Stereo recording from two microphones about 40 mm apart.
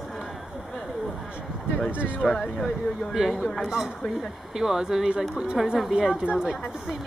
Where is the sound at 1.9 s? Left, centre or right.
Right.